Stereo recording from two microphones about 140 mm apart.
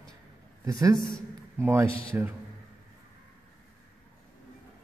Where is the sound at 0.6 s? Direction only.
25° right (ahead or behind).